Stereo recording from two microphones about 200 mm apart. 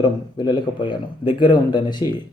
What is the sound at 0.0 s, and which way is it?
A man's voice, 20° left (ahead or behind).